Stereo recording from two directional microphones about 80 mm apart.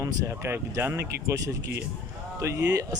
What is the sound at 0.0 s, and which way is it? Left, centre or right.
Speech, right.